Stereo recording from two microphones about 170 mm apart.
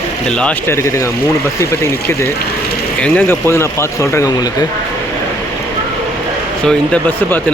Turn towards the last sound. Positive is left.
turn(degrees=10)  # may be behind; listen again after turning